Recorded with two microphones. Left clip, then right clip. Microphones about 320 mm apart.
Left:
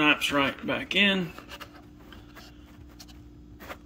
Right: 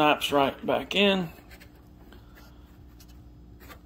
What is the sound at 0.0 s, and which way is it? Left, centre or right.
Speech, left.